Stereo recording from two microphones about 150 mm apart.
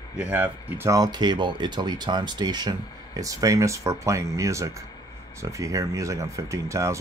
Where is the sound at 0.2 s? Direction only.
10° right (ahead or behind).